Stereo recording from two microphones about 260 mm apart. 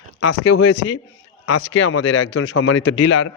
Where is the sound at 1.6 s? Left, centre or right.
Left.